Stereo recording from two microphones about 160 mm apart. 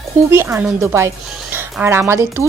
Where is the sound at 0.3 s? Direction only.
15° right (ahead or behind).